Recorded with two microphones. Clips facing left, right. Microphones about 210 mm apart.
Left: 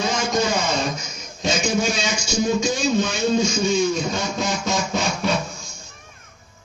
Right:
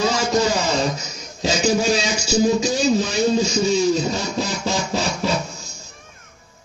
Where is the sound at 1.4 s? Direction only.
35° right (ahead or behind).